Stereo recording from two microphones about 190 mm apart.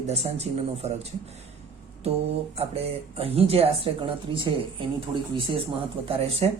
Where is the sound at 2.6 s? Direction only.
30° right (ahead or behind).